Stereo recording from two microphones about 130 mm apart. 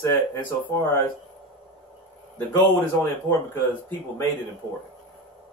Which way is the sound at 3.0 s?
15° left (ahead or behind).